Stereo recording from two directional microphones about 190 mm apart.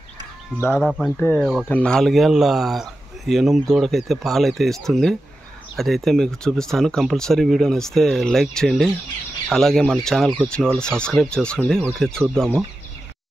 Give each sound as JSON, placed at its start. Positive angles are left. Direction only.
{"t": 0.7, "sound": "speech", "side_deg": 0}